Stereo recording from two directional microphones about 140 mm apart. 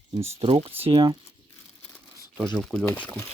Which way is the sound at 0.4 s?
40° right (ahead or behind).